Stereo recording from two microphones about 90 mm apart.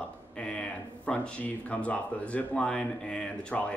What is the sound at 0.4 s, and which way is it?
Speech, 10° left (ahead or behind).